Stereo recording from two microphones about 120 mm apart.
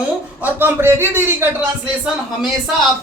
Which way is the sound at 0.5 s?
20° right (ahead or behind).